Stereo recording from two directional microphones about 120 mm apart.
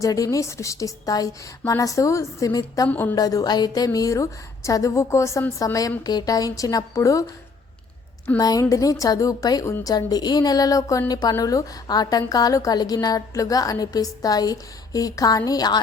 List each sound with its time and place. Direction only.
0.0 s a woman's voice: 30° left (ahead or behind)
2.9 s a woman's voice: 15° left (ahead or behind)
3.2 s a woman's voice: 30° left (ahead or behind)
8.4 s a woman's voice: 30° left (ahead or behind)